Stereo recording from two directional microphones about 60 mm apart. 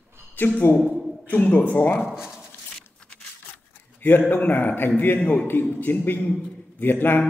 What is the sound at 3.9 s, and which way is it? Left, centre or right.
A man's voice, left.